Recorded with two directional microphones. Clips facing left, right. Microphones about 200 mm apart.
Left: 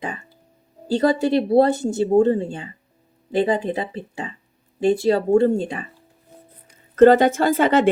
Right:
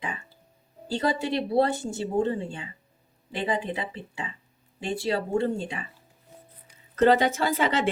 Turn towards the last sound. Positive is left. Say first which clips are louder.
# left 8 dB
turn(degrees=50)  # may be behind; listen again after turning